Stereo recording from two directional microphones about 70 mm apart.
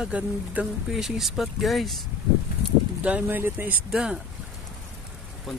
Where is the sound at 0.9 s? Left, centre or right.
Centre.